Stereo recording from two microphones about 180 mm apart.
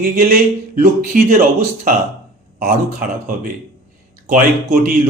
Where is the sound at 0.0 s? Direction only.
55° right (ahead or behind).